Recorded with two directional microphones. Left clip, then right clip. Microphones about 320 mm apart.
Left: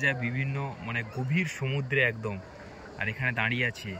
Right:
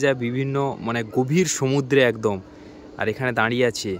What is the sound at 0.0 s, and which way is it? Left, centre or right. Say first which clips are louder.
Speech: right 7 dB; centre.